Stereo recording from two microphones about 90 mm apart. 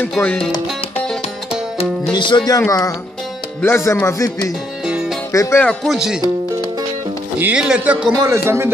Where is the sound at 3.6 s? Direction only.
30° left (ahead or behind).